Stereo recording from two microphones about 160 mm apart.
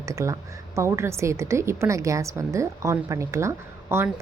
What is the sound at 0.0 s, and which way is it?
A woman's voice, 20° right (ahead or behind).